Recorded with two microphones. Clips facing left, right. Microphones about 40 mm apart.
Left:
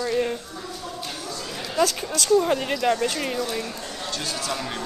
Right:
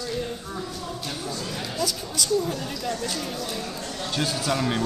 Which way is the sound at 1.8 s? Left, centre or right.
Left.